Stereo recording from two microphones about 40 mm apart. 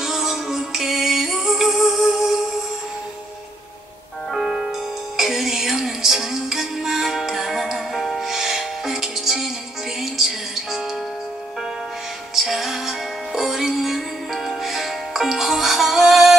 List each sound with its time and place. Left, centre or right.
0.0 s music: centre
4.3 s music: centre
5.1 s music: centre
12.4 s music: centre